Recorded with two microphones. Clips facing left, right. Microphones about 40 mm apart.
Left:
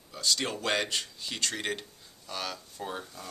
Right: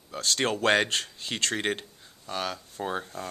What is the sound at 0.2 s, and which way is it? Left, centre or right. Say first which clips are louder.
Speech: right 5 dB; right.